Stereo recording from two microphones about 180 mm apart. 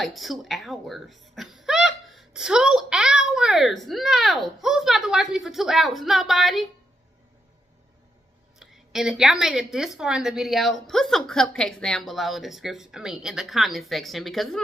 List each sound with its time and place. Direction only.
0.0 s speech: centre (ahead or behind)
8.5 s speech: centre (ahead or behind)